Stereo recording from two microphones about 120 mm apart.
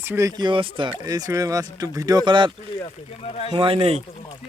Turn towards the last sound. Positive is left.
turn(degrees=-55)  # may be behind; listen again after turning